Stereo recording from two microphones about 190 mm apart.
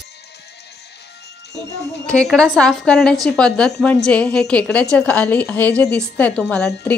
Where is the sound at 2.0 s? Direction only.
5° left (ahead or behind).